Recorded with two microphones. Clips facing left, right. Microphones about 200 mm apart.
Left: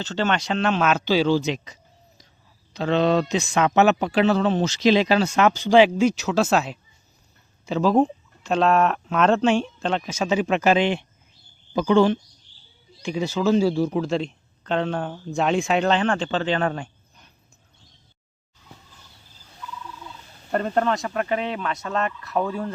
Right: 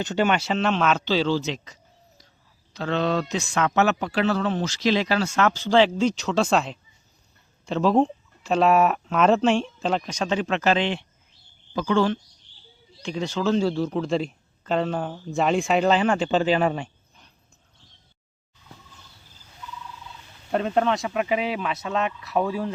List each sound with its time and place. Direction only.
0.0 s speech: 15° right (ahead or behind)
20.5 s speech: centre (ahead or behind)